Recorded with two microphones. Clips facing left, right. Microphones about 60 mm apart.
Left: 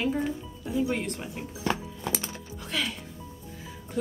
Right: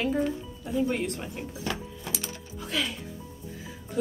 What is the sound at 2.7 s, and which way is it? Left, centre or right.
Music, centre.